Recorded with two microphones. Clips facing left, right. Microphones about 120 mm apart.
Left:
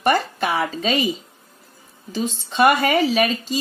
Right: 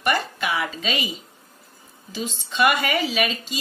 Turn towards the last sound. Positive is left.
turn(degrees=40)  # may be behind; listen again after turning